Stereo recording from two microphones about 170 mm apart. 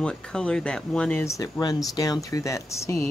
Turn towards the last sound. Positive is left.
turn(degrees=15)  # may be behind; listen again after turning